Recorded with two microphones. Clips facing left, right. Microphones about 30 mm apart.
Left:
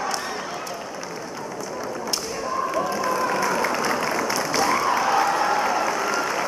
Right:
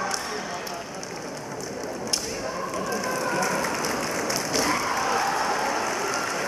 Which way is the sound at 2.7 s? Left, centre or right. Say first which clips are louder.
Left 3 dB; centre.